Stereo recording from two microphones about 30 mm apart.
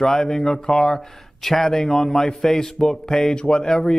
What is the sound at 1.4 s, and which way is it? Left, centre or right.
Speech, centre.